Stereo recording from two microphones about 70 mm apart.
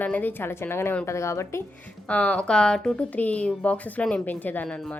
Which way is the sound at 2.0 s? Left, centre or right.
Centre.